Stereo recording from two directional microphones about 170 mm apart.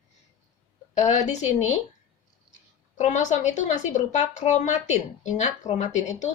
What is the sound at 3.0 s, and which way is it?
Speech, 45° left (ahead or behind).